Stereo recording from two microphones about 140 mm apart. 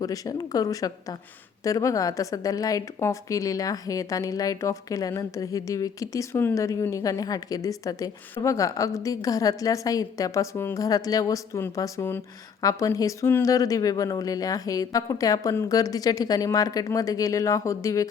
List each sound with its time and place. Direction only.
0.0 s a woman's voice: 25° left (ahead or behind)